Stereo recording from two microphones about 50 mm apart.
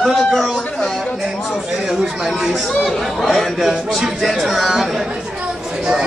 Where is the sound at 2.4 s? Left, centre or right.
Centre.